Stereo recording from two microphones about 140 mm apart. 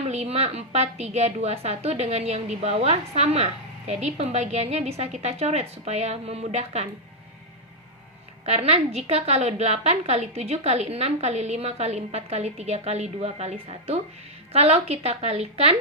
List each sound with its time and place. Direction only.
0.1 s a woman's voice: 45° right (ahead or behind)
8.4 s a woman's voice: 45° right (ahead or behind)